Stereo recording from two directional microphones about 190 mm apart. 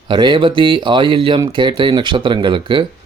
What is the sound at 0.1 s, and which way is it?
Speech, 25° right (ahead or behind).